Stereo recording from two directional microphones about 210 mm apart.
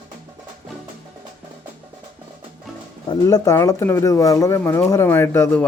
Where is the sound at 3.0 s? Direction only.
15° left (ahead or behind).